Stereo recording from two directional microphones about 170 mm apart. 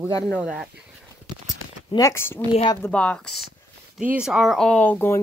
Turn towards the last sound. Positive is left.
turn(degrees=15)  # may be behind; listen again after turning